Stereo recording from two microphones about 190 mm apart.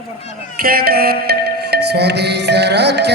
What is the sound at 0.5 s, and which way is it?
Music, 50° right (ahead or behind).